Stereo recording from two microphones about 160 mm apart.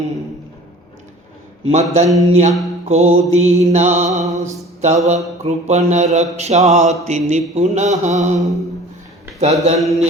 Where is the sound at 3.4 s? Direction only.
45° right (ahead or behind).